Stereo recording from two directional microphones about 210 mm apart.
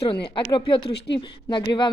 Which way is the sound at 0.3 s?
25° left (ahead or behind).